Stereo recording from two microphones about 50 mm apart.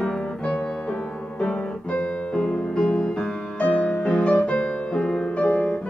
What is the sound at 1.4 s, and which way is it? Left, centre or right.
Music, left.